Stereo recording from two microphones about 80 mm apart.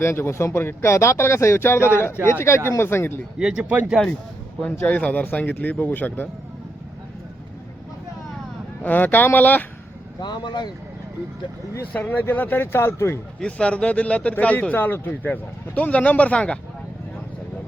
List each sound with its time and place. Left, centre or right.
0.0 s speech: left
3.3 s speech: centre
4.6 s speech: centre
8.8 s speech: left
10.2 s speech: left
11.8 s speech: left
13.4 s speech: centre